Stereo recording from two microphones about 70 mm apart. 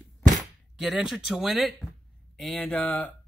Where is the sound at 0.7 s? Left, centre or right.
Centre.